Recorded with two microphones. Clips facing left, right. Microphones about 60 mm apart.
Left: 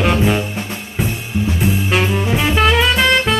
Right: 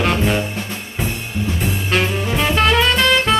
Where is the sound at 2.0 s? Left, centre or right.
Centre.